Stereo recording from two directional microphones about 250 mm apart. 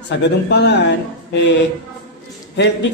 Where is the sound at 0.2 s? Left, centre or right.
Left.